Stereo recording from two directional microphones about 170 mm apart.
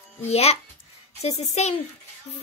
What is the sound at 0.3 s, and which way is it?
A child's voice, 40° left (ahead or behind).